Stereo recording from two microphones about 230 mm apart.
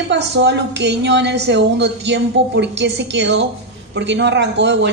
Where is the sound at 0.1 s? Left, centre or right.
Right.